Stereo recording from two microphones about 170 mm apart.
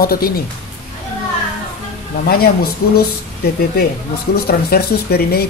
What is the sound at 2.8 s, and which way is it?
Speech, 65° left (ahead or behind).